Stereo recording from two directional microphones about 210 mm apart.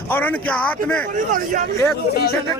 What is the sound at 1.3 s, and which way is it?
Speech, 40° right (ahead or behind).